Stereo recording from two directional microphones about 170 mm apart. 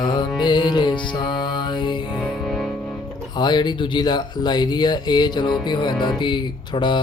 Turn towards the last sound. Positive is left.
turn(degrees=25)  # may be behind; listen again after turning